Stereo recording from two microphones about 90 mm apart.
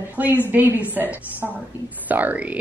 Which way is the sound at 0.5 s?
20° right (ahead or behind).